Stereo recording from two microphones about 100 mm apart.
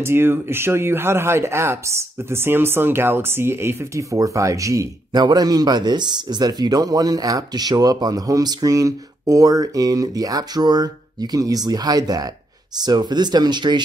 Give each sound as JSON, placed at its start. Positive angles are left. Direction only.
{"t": 0.0, "sound": "speech", "side_deg": -25}
{"t": 5.1, "sound": "speech", "side_deg": -45}